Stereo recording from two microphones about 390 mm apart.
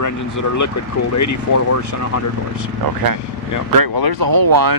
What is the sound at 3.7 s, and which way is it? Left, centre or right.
Speech, right.